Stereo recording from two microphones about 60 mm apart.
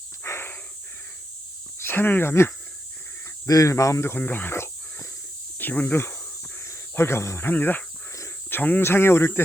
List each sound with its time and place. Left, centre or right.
0.3 s a sound: left
1.8 s speech: left
3.4 s speech: left
4.2 s a sound: left
5.5 s speech: left
6.6 s cricket: left
7.5 s speech: left